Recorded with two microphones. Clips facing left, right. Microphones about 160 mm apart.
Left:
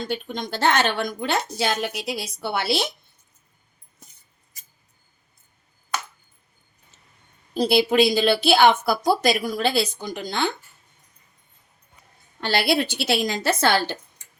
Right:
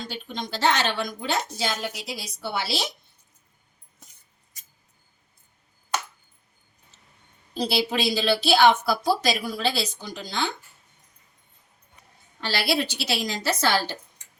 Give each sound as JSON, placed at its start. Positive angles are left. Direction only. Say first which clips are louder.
{"t": 0.1, "sound": "a woman's voice", "louder": "left 5 dB", "side_deg": 50}
{"t": 7.5, "sound": "a woman's voice", "louder": "left 7 dB", "side_deg": 55}
{"t": 12.4, "sound": "a woman's voice", "louder": "left 4 dB", "side_deg": 55}